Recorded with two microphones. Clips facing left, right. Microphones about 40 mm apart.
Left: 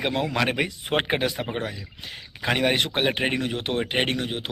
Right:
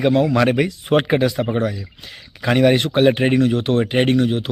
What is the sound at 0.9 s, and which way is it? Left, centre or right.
Speech, left.